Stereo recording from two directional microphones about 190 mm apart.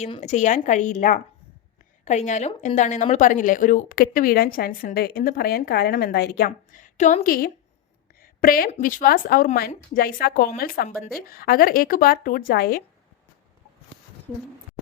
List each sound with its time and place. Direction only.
0.0 s a woman's voice: 35° left (ahead or behind); by 12.8 s 50° left (ahead or behind)